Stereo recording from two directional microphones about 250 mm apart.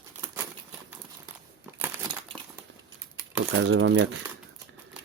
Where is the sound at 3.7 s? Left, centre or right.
Right.